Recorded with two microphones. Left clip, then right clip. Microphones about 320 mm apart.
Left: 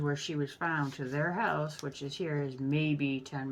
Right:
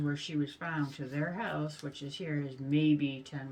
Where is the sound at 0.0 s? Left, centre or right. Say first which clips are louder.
Left 1 dB; centre.